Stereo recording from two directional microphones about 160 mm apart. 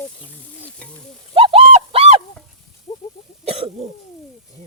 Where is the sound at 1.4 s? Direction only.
35° right (ahead or behind).